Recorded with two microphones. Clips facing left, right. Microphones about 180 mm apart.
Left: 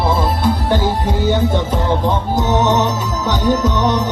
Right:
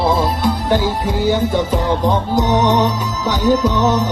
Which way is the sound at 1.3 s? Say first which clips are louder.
Right 1 dB; 10° right (ahead or behind).